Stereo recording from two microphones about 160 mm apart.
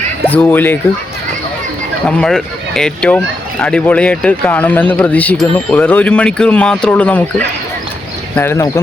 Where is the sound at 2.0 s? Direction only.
5° left (ahead or behind).